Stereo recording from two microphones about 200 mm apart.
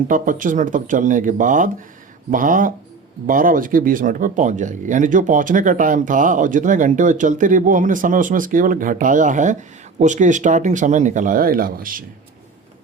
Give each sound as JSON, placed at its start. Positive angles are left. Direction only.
{"t": 0.1, "sound": "speech", "side_deg": -40}